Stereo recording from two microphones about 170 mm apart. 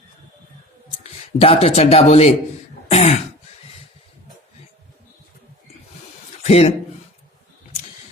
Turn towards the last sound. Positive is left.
turn(degrees=40)  # may be behind; listen again after turning